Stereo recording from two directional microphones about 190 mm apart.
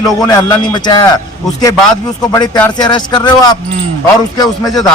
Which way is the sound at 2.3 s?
20° left (ahead or behind).